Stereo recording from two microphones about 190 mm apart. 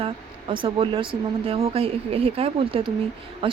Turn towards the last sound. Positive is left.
turn(degrees=-30)  # may be behind; listen again after turning